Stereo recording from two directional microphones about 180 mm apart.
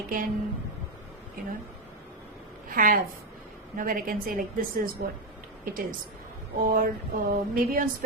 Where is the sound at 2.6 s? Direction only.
50° right (ahead or behind).